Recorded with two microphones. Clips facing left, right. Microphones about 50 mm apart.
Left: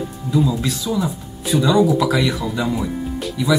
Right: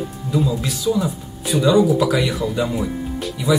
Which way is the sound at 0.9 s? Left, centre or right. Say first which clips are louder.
Right 6 dB; centre.